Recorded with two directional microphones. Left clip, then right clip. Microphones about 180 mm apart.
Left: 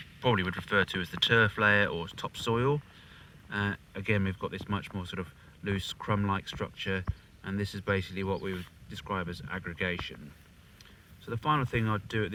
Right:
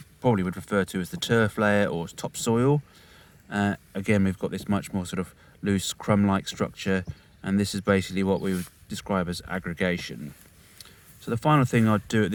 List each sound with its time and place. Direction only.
0.2 s speech: 75° right (ahead or behind)
11.3 s speech: 80° right